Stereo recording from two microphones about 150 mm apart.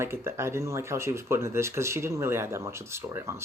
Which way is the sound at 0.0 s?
15° right (ahead or behind).